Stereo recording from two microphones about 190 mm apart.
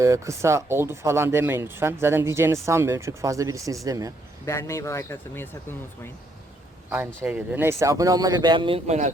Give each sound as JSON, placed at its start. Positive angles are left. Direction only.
{"t": 0.0, "sound": "speech", "side_deg": -15}
{"t": 4.4, "sound": "speech", "side_deg": 15}
{"t": 7.2, "sound": "speech", "side_deg": -10}